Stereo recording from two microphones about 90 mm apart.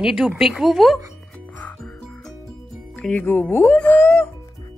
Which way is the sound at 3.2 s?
20° left (ahead or behind).